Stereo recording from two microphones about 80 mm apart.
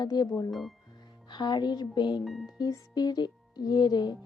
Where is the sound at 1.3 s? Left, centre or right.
Left.